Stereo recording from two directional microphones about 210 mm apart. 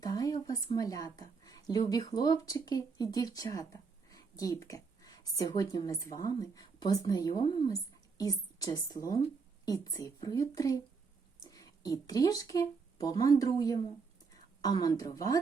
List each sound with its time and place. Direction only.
0.0 s a woman's voice: 20° left (ahead or behind)